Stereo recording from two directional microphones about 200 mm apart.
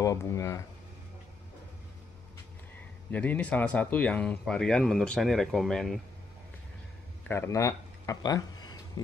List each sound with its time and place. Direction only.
0.0 s speech: 15° left (ahead or behind)
3.1 s speech: 10° left (ahead or behind)
7.2 s a sound: 15° left (ahead or behind)